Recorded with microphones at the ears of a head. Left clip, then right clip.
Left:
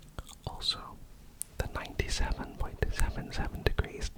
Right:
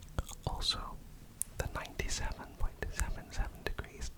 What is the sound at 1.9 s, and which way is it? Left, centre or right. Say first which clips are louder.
Whispering: left 4 dB; left.